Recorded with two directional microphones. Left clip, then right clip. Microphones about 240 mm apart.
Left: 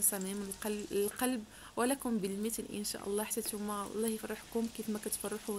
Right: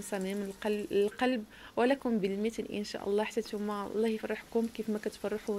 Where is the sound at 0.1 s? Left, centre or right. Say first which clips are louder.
Right 5 dB; centre.